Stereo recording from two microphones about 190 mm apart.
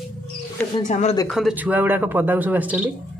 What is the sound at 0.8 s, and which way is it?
Speech, 40° left (ahead or behind).